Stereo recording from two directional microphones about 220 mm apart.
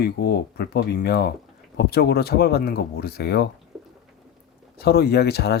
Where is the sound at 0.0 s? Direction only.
45° left (ahead or behind).